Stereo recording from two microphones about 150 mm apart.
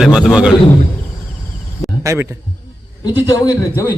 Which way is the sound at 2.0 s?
20° right (ahead or behind).